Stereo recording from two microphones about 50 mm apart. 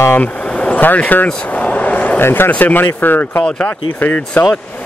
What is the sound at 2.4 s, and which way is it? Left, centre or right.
Speech, left.